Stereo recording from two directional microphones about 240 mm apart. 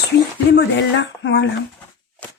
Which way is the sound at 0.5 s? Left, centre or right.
Left.